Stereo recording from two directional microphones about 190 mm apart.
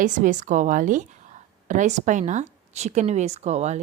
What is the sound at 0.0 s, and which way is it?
A woman's voice, 40° right (ahead or behind).